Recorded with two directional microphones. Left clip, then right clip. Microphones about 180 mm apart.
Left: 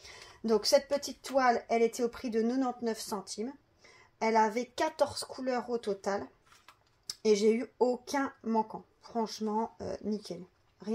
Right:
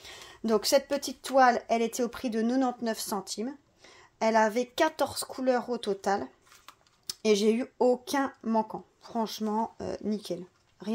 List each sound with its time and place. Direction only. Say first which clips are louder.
0.0 s speech: right 3 dB; 40° right (ahead or behind)